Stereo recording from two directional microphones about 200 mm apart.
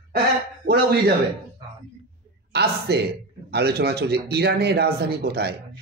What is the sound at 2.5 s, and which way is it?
A man's voice, 55° right (ahead or behind).